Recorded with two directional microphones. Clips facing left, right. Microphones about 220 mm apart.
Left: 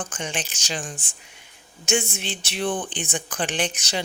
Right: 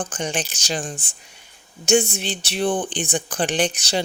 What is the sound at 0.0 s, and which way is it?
Speech, 35° right (ahead or behind).